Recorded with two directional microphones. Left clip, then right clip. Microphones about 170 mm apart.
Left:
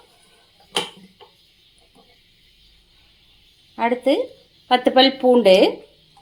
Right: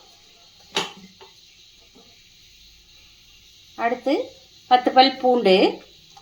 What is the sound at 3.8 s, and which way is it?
A woman's voice, 30° left (ahead or behind).